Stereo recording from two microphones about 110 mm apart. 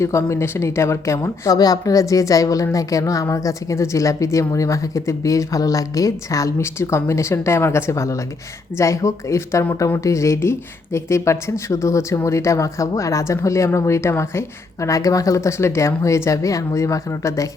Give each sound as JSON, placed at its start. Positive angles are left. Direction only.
{"t": 0.0, "sound": "speech", "side_deg": 25}